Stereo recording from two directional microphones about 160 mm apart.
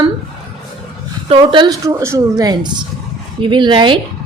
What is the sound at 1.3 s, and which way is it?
A woman's voice, 30° right (ahead or behind).